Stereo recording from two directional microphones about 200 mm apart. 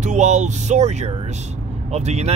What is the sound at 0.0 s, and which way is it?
Speech, 35° right (ahead or behind).